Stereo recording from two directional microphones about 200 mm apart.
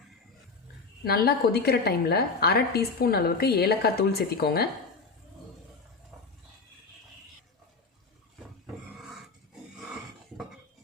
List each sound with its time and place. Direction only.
1.0 s a woman's voice: 50° left (ahead or behind)